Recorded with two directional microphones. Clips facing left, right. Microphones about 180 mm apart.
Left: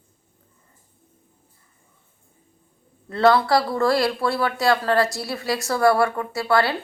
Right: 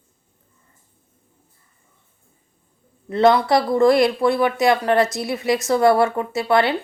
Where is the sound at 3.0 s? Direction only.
20° right (ahead or behind).